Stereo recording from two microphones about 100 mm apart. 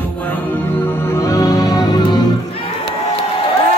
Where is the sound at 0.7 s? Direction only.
20° left (ahead or behind); by 2.2 s 45° left (ahead or behind).